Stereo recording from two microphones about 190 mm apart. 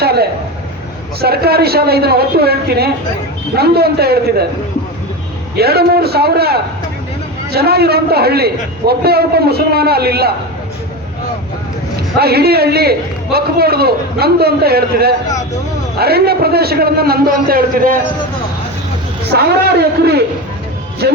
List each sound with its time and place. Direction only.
0.0 s a sound: 55° right (ahead or behind)
1.2 s a man's voice: 55° right (ahead or behind)
5.5 s a man's voice: 55° right (ahead or behind)
12.2 s a man's voice: 55° right (ahead or behind)
19.3 s a man's voice: 60° right (ahead or behind)